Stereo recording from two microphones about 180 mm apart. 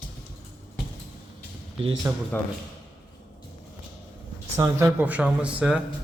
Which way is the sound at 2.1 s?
15° right (ahead or behind).